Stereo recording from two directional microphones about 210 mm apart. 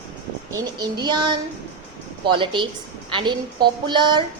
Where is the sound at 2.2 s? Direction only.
25° right (ahead or behind).